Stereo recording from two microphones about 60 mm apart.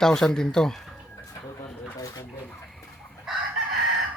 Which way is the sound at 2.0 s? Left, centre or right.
Left.